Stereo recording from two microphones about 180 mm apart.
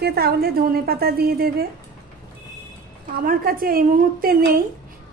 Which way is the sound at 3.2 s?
55° right (ahead or behind).